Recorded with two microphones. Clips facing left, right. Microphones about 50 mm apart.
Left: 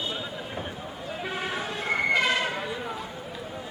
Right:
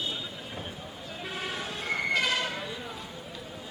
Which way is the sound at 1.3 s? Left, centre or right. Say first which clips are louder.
Left 3 dB; centre.